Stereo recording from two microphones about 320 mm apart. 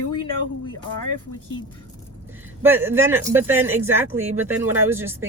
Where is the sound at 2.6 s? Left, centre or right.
Centre.